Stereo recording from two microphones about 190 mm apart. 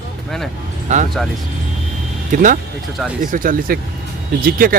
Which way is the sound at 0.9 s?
40° right (ahead or behind).